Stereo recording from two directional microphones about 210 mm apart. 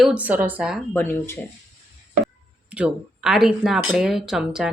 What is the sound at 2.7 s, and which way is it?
Speech, 5° right (ahead or behind).